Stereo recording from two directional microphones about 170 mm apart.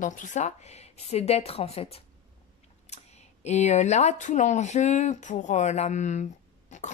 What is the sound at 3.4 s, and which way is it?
Speech, 40° left (ahead or behind).